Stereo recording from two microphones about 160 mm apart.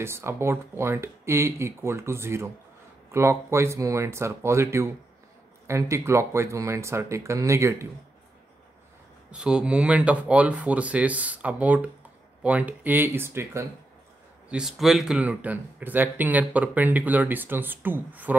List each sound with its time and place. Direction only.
0.0 s speech: 15° right (ahead or behind)
9.3 s speech: 5° right (ahead or behind)
14.5 s speech: 5° right (ahead or behind)